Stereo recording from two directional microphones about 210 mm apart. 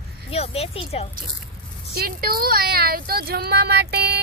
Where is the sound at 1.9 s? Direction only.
45° right (ahead or behind).